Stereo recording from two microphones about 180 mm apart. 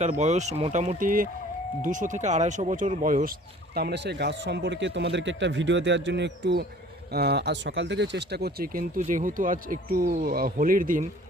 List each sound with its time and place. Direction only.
0.0 s speech: 40° right (ahead or behind)
3.8 s a man's voice: 65° right (ahead or behind); by 11.0 s 50° right (ahead or behind)